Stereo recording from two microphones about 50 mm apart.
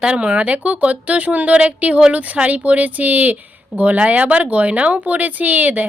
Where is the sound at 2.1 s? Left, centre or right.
Right.